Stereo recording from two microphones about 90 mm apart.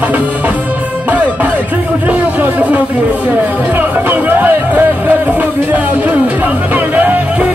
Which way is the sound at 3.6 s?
20° right (ahead or behind).